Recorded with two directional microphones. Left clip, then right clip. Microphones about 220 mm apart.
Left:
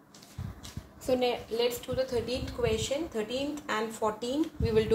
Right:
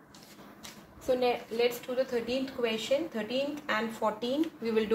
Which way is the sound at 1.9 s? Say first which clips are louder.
Even; 20° left (ahead or behind).